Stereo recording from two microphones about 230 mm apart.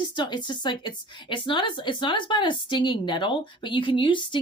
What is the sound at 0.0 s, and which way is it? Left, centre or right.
A woman's voice, centre.